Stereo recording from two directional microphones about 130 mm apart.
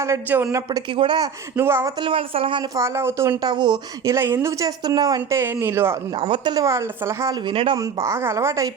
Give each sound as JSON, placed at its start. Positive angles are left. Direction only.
{"t": 0.0, "sound": "speech", "side_deg": -20}
{"t": 0.9, "sound": "a woman's voice", "side_deg": -40}
{"t": 1.5, "sound": "speech", "side_deg": -20}
{"t": 2.0, "sound": "a woman's voice", "side_deg": -40}
{"t": 2.7, "sound": "speech", "side_deg": -20}
{"t": 3.5, "sound": "a woman's voice", "side_deg": -35}
{"t": 4.0, "sound": "speech", "side_deg": -20}
{"t": 5.4, "sound": "speech", "side_deg": -20}
{"t": 6.1, "sound": "speech", "side_deg": -45}
{"t": 7.3, "sound": "a woman's voice", "side_deg": -40}
{"t": 7.8, "sound": "speech", "side_deg": -25}